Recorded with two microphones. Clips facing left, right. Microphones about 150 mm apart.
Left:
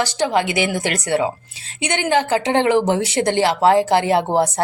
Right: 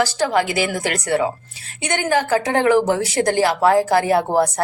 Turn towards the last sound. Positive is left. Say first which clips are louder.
# even
turn(degrees=25)  # may be behind; listen again after turning